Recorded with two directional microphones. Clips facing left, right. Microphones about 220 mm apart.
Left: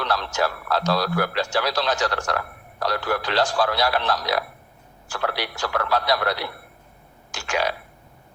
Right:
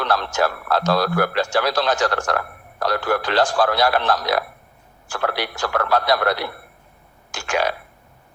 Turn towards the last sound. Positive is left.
turn(degrees=-50)  # may be behind; listen again after turning